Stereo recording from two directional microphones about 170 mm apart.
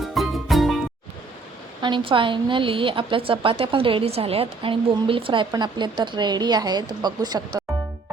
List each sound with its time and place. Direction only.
0.1 s music: centre (ahead or behind)
1.8 s a woman's voice: 30° right (ahead or behind)